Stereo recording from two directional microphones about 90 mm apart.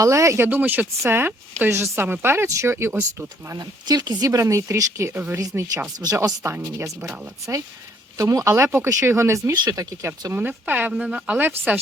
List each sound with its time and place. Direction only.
0.0 s speech: 35° right (ahead or behind)
3.6 s speech: 50° right (ahead or behind); by 5.1 s 30° right (ahead or behind)
5.1 s speech: 20° right (ahead or behind)
5.4 s speech: 40° right (ahead or behind)
10.3 s speech: 20° right (ahead or behind)